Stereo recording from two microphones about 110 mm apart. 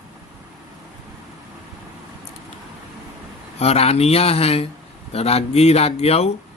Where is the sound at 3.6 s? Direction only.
70° left (ahead or behind).